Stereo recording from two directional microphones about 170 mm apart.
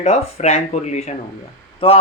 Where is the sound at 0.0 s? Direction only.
40° left (ahead or behind).